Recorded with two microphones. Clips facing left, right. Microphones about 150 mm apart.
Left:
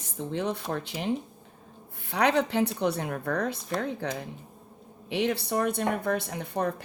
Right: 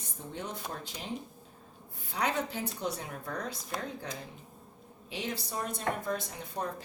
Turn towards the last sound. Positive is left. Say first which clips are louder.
# left 7 dB
turn(degrees=65)  # may be behind; listen again after turning